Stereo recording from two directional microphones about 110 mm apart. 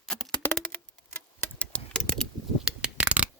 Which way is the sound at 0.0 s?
5° left (ahead or behind).